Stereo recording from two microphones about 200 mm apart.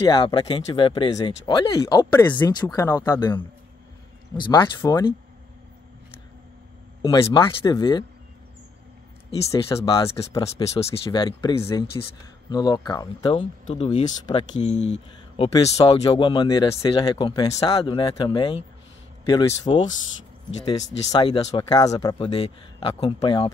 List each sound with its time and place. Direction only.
0.0 s speech: 20° left (ahead or behind)
4.5 s speech: 20° left (ahead or behind)
7.0 s speech: 15° left (ahead or behind)
9.5 s speech: 15° left (ahead or behind)
14.5 s speech: 35° left (ahead or behind)
19.7 s speech: 25° left (ahead or behind)
21.1 s speech: 25° left (ahead or behind)